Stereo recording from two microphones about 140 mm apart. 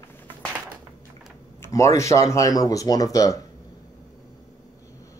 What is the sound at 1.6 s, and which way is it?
Speech, 20° left (ahead or behind).